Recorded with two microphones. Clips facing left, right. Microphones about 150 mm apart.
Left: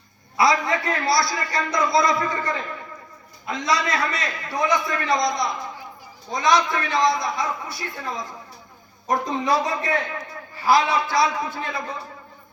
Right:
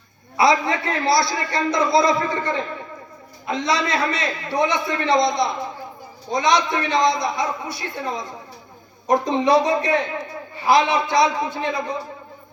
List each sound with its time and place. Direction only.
0.3 s a man's voice: 25° right (ahead or behind)